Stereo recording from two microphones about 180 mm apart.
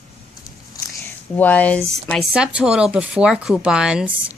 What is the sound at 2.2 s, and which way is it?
A man's voice, 5° right (ahead or behind).